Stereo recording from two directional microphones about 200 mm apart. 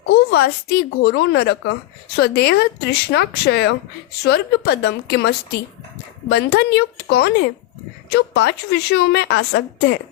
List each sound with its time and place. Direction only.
0.1 s a child's voice: 55° left (ahead or behind)